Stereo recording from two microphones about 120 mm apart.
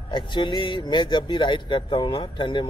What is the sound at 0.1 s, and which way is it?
A man's voice, 40° left (ahead or behind).